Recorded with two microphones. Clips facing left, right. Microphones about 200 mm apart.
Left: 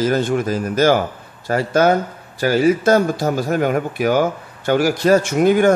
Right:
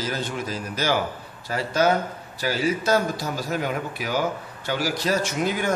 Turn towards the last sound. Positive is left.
turn(degrees=55)  # may be behind; listen again after turning